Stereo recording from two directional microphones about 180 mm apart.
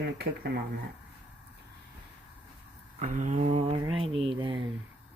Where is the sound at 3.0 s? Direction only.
45° right (ahead or behind); by 4.6 s 25° right (ahead or behind).